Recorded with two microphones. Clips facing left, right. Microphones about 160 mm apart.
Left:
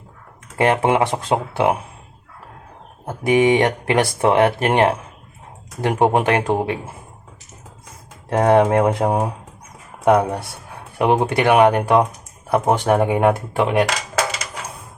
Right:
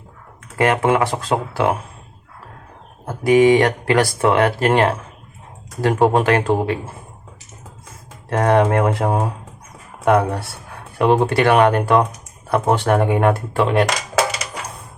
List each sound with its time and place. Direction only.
0.5 s speech: 25° left (ahead or behind)
3.1 s speech: 20° left (ahead or behind)
8.3 s speech: 20° left (ahead or behind)